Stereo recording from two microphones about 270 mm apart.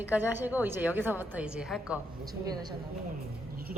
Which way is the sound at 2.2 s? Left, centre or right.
Centre.